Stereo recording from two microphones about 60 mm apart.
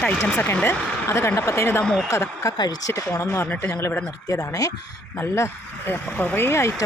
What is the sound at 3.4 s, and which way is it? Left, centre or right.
Speech, left.